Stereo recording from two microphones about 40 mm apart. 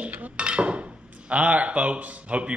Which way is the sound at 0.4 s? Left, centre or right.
Right.